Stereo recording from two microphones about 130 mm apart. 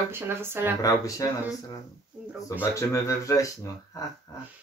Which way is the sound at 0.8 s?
25° left (ahead or behind).